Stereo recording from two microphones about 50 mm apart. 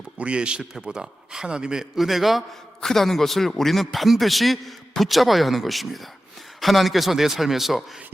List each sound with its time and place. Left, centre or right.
0.2 s a man's voice: right; by 7.9 s centre